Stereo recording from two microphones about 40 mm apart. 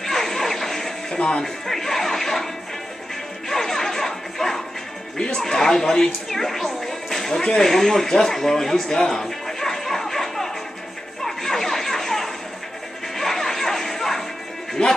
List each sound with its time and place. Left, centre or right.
0.0 s music: centre
1.1 s speech: left
1.4 s speech: centre
3.4 s music: centre
5.2 s speech: centre
6.2 s music: centre
7.4 s speech: centre
11.2 s a sound: centre
13.1 s music: centre
14.8 s a sound: centre